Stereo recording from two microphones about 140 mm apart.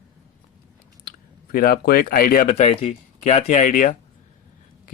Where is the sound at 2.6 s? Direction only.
55° left (ahead or behind).